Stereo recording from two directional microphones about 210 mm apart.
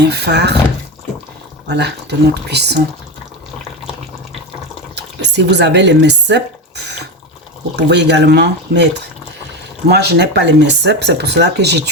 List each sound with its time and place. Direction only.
0.0 s speech: 55° right (ahead or behind)
1.6 s speech: 55° right (ahead or behind)
4.9 s speech: 55° right (ahead or behind)
9.9 s speech: 50° right (ahead or behind)